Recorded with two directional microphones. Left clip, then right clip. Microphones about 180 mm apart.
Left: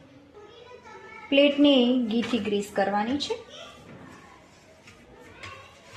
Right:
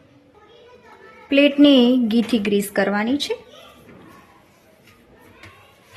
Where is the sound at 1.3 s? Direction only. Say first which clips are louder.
Right 5 dB; 45° right (ahead or behind).